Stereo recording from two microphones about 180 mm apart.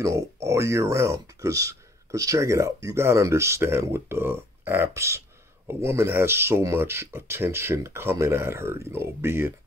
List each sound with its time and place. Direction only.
0.0 s speech: 15° right (ahead or behind)